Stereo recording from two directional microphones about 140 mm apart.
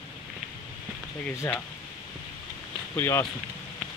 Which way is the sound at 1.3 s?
20° left (ahead or behind).